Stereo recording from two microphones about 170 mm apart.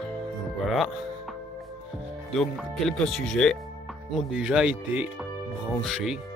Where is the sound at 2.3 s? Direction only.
Centre (ahead or behind).